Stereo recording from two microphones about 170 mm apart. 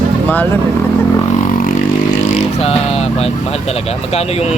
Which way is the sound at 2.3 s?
40° left (ahead or behind).